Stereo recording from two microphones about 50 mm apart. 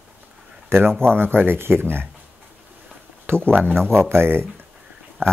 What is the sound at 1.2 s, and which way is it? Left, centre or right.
Speech, right.